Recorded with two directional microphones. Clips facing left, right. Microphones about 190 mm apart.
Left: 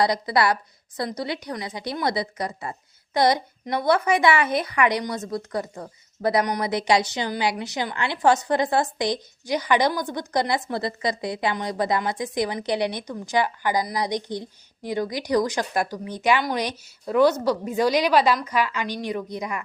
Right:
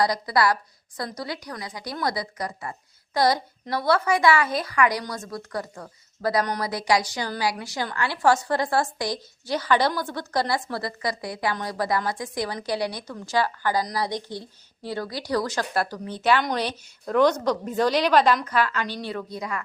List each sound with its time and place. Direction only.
0.0 s a woman's voice: 25° left (ahead or behind)